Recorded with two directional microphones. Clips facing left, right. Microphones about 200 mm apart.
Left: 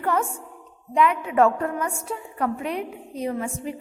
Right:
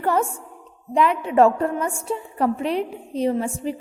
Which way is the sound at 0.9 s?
30° right (ahead or behind).